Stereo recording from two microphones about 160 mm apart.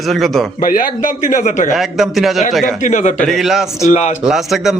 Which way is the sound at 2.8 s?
50° left (ahead or behind).